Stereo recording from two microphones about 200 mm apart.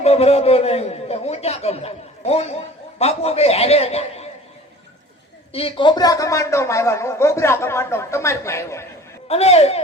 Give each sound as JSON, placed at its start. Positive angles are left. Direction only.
{"t": 0.0, "sound": "a man's voice", "side_deg": 30}
{"t": 5.5, "sound": "a man's voice", "side_deg": 25}
{"t": 9.2, "sound": "a man's voice", "side_deg": 30}